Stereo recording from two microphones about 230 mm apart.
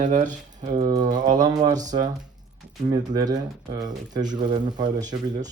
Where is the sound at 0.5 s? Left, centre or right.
Centre.